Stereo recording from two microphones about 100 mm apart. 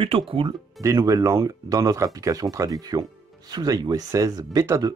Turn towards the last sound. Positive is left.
turn(degrees=-40)  # may be behind; listen again after turning